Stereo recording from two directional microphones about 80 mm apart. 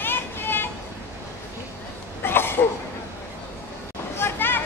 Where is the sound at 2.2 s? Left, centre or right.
Left.